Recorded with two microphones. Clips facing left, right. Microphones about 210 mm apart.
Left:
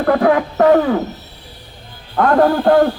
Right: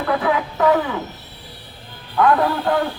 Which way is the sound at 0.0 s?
50° left (ahead or behind).